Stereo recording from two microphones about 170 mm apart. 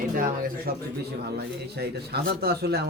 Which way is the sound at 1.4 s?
75° right (ahead or behind).